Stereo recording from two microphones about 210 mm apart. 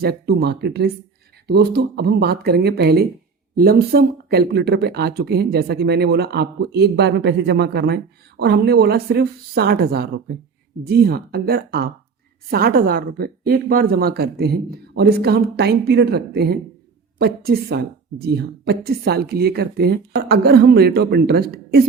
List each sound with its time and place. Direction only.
0.0 s speech: 50° right (ahead or behind)